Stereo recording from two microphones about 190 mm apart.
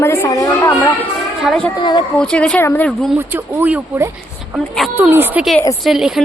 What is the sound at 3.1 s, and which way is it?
A woman's voice, 10° right (ahead or behind).